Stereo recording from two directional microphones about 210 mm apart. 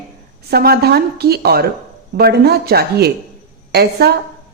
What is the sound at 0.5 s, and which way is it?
Speech, 50° right (ahead or behind).